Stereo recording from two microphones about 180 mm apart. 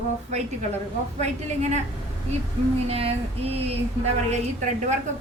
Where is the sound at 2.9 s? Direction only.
35° right (ahead or behind).